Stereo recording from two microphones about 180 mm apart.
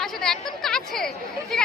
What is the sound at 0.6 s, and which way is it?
Speech, 5° left (ahead or behind).